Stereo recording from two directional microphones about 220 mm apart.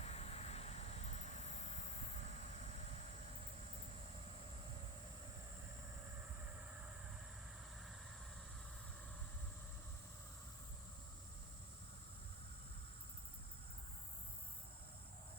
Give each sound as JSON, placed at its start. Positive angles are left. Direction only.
{"t": 0.0, "sound": "vehicle", "side_deg": 30}